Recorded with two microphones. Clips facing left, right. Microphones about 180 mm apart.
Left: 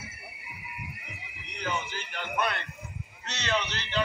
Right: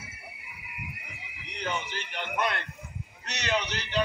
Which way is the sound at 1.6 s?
25° right (ahead or behind).